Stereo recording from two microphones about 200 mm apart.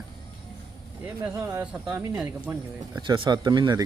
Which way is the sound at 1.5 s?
15° right (ahead or behind).